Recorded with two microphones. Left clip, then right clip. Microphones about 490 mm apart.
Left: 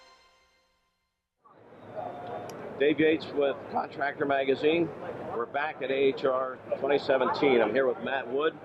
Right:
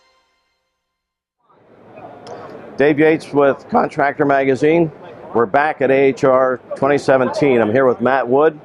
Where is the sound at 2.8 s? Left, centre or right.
Right.